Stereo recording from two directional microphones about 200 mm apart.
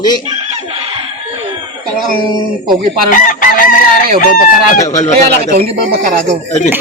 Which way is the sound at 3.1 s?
40° left (ahead or behind).